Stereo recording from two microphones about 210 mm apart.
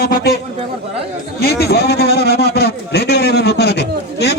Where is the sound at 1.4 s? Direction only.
45° left (ahead or behind).